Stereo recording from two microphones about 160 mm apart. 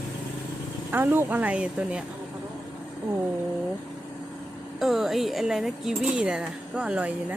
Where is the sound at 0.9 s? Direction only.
10° right (ahead or behind).